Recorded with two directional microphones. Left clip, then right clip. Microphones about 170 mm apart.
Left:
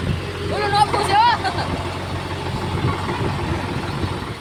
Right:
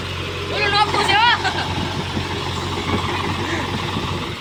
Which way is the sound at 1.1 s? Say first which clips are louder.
Even; 30° left (ahead or behind).